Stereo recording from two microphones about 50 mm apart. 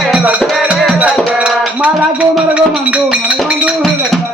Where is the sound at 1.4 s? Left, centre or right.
Right.